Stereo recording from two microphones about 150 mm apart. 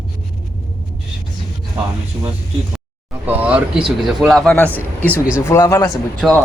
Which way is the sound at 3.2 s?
10° right (ahead or behind).